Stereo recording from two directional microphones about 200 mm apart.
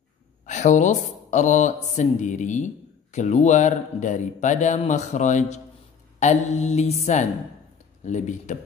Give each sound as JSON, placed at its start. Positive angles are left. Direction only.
{"t": 0.5, "sound": "speech", "side_deg": 40}